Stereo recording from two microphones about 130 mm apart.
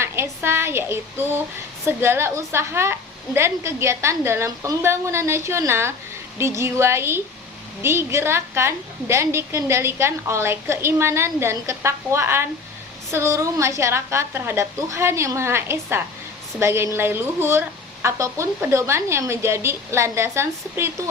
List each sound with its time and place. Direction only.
0.0 s a woman's voice: 20° right (ahead or behind)